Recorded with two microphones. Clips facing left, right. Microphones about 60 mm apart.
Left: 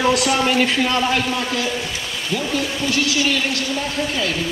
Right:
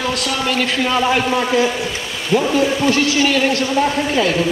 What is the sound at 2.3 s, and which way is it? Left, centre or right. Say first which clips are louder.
Speech: right 8 dB; right.